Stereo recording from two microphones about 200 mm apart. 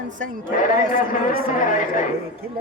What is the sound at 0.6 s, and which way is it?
A man's voice, 40° left (ahead or behind).